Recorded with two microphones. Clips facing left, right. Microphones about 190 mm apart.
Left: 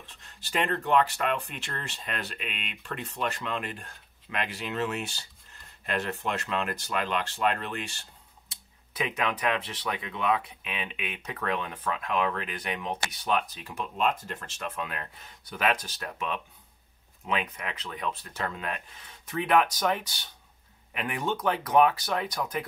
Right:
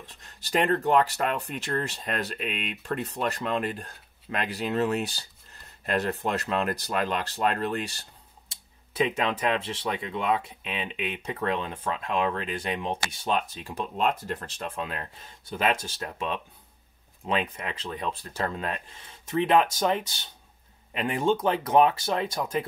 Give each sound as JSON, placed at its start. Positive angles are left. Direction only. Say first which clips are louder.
{"t": 0.0, "sound": "speech", "louder": "right 3 dB", "side_deg": -40}